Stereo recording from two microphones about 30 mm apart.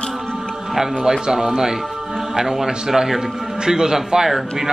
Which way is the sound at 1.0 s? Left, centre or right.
Centre.